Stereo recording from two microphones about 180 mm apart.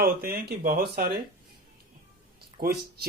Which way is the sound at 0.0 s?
55° right (ahead or behind).